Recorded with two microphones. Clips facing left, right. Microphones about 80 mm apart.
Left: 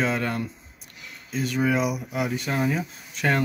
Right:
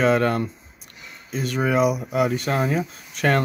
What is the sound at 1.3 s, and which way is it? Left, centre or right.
Speech, right.